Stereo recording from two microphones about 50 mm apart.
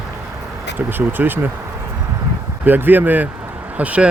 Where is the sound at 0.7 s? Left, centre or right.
Right.